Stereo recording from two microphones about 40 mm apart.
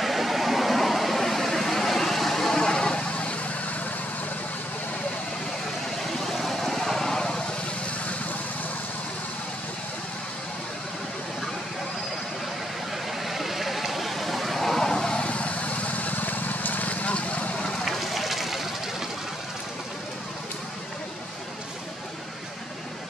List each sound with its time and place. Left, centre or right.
0.0 s vehicle: centre; by 3.7 s left
6.2 s vehicle: centre
13.2 s vehicle: centre
15.2 s vehicle: left
17.8 s run: centre